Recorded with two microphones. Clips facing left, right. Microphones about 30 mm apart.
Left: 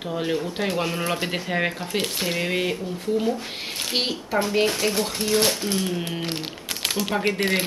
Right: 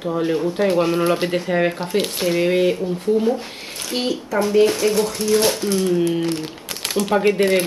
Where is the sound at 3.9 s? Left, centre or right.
Left.